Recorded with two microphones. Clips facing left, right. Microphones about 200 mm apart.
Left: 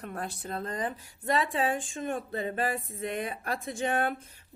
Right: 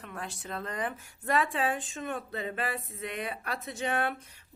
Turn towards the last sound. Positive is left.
turn(degrees=40)  # may be behind; listen again after turning